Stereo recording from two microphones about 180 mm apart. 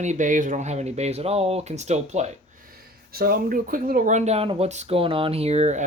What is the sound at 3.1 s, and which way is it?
Speech, 55° right (ahead or behind).